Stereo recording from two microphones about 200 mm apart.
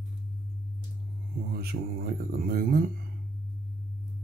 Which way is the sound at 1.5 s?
50° right (ahead or behind).